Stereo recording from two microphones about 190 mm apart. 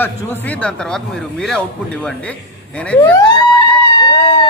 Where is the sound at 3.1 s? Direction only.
25° left (ahead or behind).